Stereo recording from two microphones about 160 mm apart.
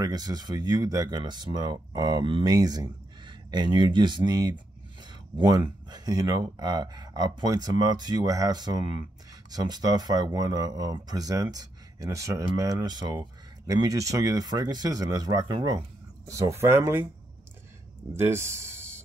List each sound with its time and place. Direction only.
0.0 s speech: 25° right (ahead or behind)
18.1 s speech: 15° right (ahead or behind)